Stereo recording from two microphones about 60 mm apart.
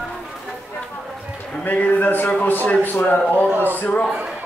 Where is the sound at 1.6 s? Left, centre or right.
Left.